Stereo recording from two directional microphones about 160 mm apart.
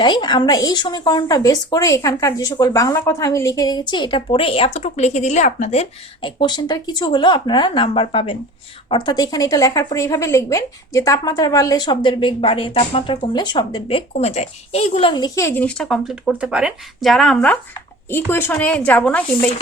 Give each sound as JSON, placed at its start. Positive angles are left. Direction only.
{"t": 0.0, "sound": "speech", "side_deg": 30}
{"t": 6.4, "sound": "speech", "side_deg": 25}
{"t": 15.1, "sound": "speech", "side_deg": 20}